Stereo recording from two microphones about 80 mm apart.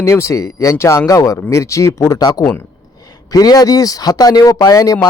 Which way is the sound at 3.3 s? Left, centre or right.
Left.